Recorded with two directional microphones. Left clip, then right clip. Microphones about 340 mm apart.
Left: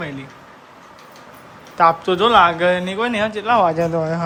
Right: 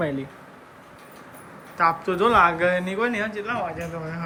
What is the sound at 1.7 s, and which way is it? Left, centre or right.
Speech, centre.